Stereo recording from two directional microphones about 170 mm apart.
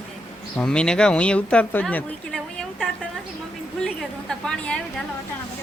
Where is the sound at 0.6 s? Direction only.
5° left (ahead or behind).